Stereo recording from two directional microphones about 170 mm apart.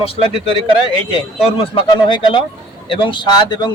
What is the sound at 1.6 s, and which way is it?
A man's voice, 30° left (ahead or behind).